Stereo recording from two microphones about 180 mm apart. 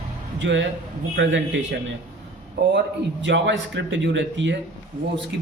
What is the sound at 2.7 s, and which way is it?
A man's voice, 85° right.